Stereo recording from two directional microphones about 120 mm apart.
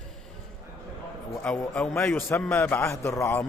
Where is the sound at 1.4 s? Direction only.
10° left (ahead or behind).